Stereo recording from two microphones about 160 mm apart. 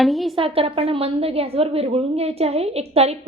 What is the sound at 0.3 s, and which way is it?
A woman's voice, 35° right (ahead or behind).